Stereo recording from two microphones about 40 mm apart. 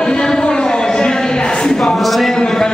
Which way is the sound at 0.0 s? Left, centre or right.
Left.